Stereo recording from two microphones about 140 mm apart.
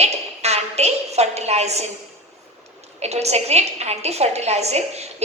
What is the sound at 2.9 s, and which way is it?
A woman's voice, 50° right (ahead or behind).